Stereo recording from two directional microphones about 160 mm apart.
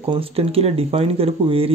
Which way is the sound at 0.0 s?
35° right (ahead or behind).